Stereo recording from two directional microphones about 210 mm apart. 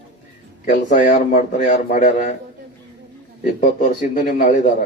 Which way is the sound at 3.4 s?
40° left (ahead or behind).